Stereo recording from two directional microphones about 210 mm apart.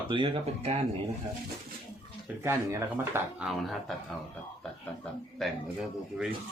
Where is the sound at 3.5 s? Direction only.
Centre (ahead or behind).